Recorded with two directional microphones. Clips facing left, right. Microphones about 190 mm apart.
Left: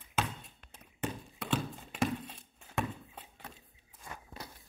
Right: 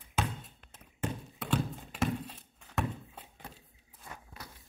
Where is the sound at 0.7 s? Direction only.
5° right (ahead or behind).